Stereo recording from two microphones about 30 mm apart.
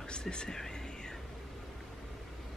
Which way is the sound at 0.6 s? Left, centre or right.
Centre.